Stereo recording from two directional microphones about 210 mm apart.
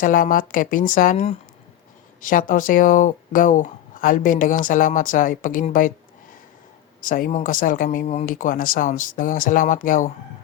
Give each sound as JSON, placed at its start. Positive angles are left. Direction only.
{"t": 0.0, "sound": "speech", "side_deg": 40}
{"t": 7.0, "sound": "speech", "side_deg": 40}